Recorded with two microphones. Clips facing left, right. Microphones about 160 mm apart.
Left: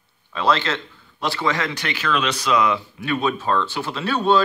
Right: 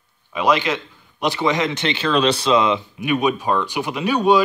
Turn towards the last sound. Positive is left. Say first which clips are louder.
# right 3 dB
turn(degrees=-15)  # may be behind; listen again after turning